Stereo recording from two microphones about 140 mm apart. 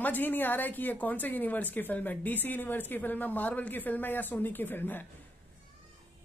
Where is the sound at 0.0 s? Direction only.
15° left (ahead or behind).